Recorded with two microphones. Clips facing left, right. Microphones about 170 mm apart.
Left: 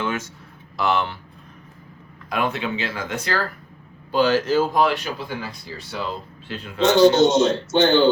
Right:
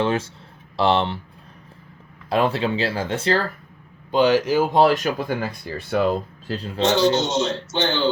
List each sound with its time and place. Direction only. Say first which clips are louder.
0.0 s speech: right 5 dB; 30° right (ahead or behind)
2.3 s speech: right 4 dB; 30° right (ahead or behind)
4.1 s a man's voice: right 1 dB; 15° right (ahead or behind)
4.7 s speech: right 4 dB; 35° right (ahead or behind); by 6.1 s 55° right (ahead or behind)
6.5 s speech: right 2 dB; 35° right (ahead or behind)
6.9 s speech: left 6 dB; 55° left (ahead or behind)